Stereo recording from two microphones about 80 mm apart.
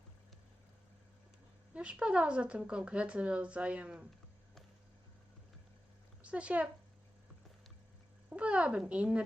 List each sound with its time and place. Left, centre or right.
1.7 s speech: centre
6.2 s speech: centre
8.3 s speech: centre